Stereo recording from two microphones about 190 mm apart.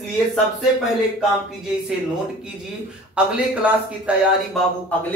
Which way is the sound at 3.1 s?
5° right (ahead or behind).